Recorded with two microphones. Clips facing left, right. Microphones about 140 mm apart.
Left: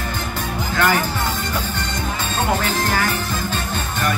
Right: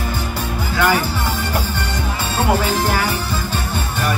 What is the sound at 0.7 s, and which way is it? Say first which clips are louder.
Music: right 1 dB; 10° right (ahead or behind).